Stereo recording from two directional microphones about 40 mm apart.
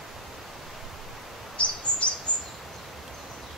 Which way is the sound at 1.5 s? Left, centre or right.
Left.